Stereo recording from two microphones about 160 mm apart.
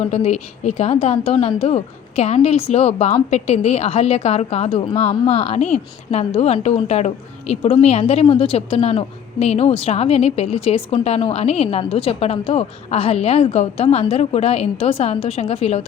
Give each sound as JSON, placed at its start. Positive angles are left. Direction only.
{"t": 0.1, "sound": "a woman's voice", "side_deg": 40}